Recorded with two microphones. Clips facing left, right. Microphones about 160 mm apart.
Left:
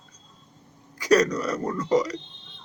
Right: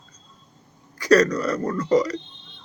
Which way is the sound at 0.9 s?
15° left (ahead or behind).